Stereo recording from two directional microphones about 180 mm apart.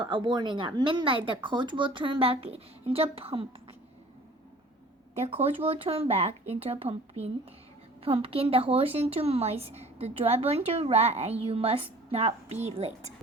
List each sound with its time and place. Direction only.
0.0 s speech: 25° right (ahead or behind)
5.1 s a woman's voice: 35° right (ahead or behind)